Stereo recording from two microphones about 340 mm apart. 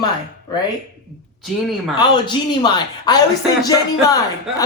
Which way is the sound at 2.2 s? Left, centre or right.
Centre.